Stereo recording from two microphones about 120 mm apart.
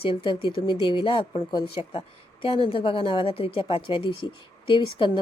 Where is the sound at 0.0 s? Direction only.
50° left (ahead or behind).